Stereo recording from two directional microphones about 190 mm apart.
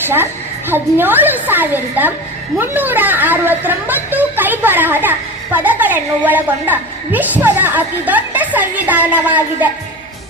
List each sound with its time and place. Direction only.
0.0 s a woman's voice: 10° right (ahead or behind)